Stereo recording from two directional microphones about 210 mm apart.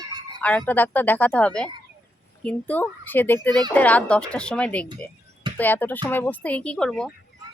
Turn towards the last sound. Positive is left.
turn(degrees=5)  # may be behind; listen again after turning